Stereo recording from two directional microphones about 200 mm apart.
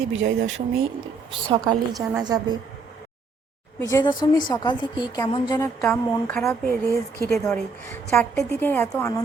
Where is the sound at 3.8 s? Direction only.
20° left (ahead or behind).